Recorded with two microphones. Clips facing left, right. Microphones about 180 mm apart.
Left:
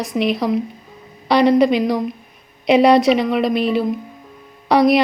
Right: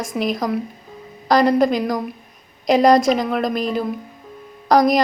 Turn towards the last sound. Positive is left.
turn(degrees=5)  # may be behind; listen again after turning